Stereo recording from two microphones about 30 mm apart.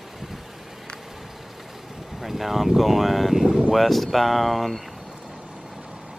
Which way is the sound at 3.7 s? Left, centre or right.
Centre.